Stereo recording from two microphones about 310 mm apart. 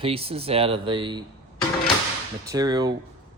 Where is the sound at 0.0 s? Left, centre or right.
Centre.